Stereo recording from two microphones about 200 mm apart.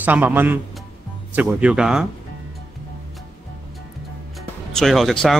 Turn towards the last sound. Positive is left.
turn(degrees=0)  # may be behind; listen again after turning